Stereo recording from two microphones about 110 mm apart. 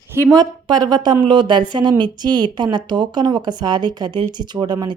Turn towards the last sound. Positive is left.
turn(degrees=-40)  # may be behind; listen again after turning